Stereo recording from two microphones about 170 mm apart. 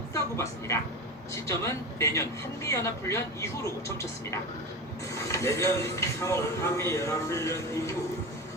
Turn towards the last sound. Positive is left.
turn(degrees=15)  # may be behind; listen again after turning